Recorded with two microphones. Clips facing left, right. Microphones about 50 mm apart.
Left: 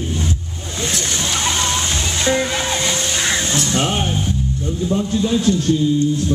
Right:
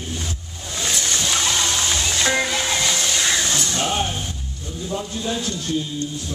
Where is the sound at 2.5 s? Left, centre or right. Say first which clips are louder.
Left 2 dB; left.